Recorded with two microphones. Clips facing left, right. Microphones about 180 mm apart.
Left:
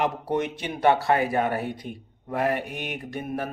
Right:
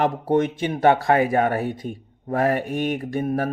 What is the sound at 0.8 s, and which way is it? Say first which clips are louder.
A man's voice: right 3 dB; 50° right (ahead or behind).